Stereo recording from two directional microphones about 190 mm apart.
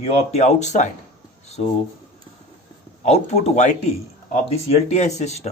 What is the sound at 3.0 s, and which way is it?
Speech, 35° left (ahead or behind).